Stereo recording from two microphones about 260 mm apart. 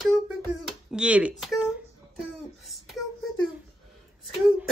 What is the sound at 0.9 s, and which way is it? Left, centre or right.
Speech, centre.